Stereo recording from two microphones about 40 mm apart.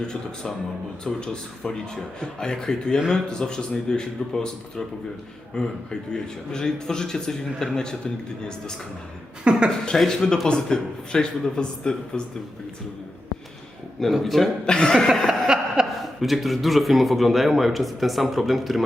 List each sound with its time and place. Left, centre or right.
0.0 s a man's voice: left
5.5 s a man's voice: centre
9.4 s a woman's voice: right
10.0 s a man's voice: centre
14.0 s speech: centre
14.7 s speech: centre
15.4 s a sound: centre
16.2 s speech: centre